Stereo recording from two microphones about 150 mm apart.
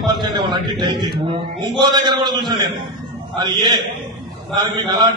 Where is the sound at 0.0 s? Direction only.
30° right (ahead or behind).